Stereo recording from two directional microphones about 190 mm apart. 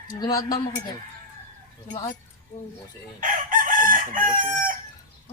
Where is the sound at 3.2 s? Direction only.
45° right (ahead or behind).